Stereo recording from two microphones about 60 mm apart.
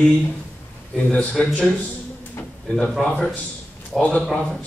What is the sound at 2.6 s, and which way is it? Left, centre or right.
A man's voice, centre.